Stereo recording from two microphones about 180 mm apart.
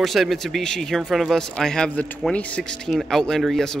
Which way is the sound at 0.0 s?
Centre (ahead or behind).